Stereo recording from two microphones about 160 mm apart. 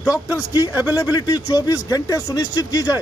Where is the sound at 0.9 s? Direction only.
20° left (ahead or behind).